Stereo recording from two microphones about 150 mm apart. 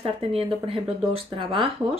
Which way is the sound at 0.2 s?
40° right (ahead or behind).